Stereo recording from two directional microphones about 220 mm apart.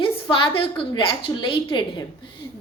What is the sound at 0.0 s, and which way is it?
A woman's voice, 25° left (ahead or behind).